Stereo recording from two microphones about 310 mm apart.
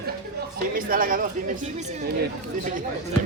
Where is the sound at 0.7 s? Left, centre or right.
Right.